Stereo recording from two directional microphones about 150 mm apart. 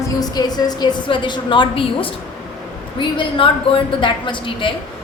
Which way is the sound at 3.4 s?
35° left (ahead or behind).